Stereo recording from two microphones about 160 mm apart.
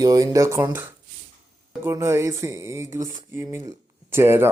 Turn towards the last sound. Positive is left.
turn(degrees=-15)  # may be behind; listen again after turning